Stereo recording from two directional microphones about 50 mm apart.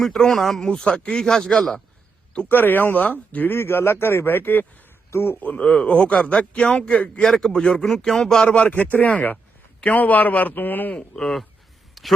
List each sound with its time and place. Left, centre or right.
0.3 s speech: centre
0.7 s speech: centre
2.5 s a man's voice: left
3.5 s a man's voice: left
5.5 s speech: centre
7.2 s speech: centre
7.9 s a man's voice: centre; by 10.9 s left
10.9 s speech: centre
12.0 s a sound: centre